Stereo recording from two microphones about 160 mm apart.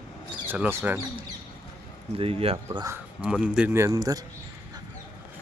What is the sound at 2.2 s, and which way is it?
Speech, 35° right (ahead or behind).